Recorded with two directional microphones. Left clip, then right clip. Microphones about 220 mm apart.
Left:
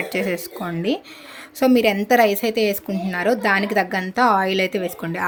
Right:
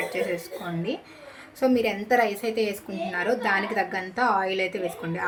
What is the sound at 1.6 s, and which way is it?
Speech, 50° left (ahead or behind).